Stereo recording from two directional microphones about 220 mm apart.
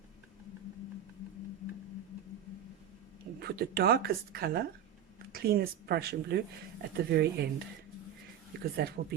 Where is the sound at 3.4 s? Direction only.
45° right (ahead or behind).